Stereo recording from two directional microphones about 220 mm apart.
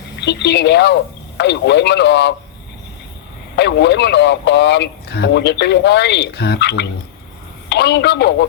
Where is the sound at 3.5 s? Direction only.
50° left (ahead or behind).